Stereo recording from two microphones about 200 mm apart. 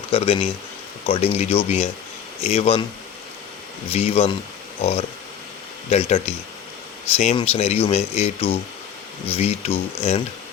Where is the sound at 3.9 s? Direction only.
30° left (ahead or behind).